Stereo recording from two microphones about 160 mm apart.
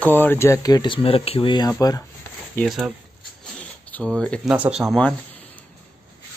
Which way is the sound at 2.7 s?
5° right (ahead or behind).